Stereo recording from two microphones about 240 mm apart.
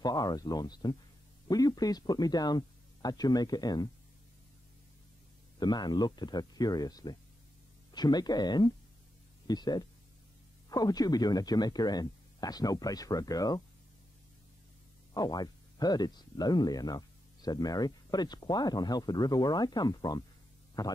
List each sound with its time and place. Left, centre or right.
0.0 s speech: centre
5.6 s speech: centre
15.1 s speech: centre